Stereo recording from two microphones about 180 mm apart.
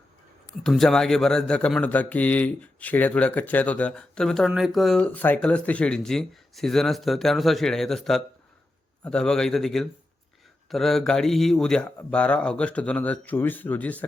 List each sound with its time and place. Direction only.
0.6 s a man's voice: 5° left (ahead or behind)